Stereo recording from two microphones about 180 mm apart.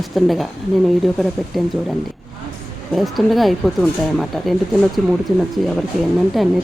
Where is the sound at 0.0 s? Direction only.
Centre (ahead or behind).